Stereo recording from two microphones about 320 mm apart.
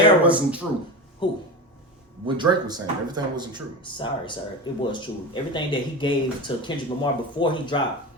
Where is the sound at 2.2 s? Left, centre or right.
Centre.